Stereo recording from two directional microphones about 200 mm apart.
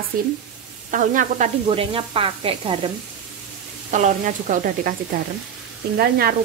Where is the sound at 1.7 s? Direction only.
25° right (ahead or behind).